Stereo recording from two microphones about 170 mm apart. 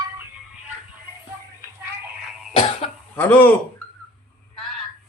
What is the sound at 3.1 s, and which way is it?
Speech, 10° left (ahead or behind).